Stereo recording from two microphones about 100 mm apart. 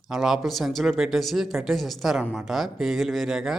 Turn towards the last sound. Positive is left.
turn(degrees=-5)  # may be behind; listen again after turning